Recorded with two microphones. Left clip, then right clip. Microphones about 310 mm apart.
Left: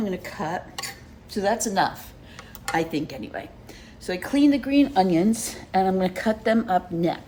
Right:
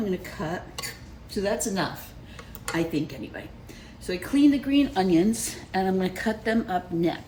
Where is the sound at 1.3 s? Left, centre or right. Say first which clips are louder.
Left 3 dB; left.